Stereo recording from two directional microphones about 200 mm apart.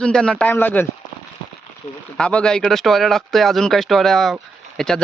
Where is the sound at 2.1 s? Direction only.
5° left (ahead or behind).